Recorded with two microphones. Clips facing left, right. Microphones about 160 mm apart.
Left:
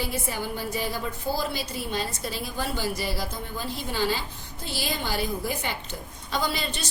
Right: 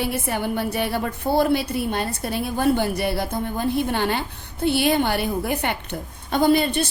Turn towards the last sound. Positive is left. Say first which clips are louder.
# right 11 dB
turn(degrees=-55)  # may be behind; listen again after turning